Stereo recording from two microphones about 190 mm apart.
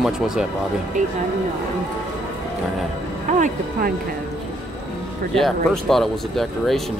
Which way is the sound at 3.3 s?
40° right (ahead or behind).